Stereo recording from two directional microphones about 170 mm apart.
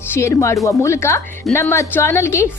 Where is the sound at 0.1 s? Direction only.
15° left (ahead or behind).